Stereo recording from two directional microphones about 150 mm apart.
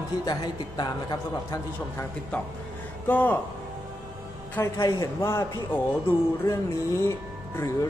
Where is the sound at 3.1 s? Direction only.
10° left (ahead or behind).